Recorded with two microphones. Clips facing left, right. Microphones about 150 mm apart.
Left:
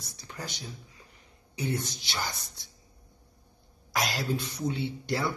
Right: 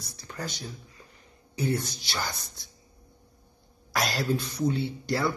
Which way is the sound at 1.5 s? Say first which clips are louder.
Right 3 dB; 20° left (ahead or behind).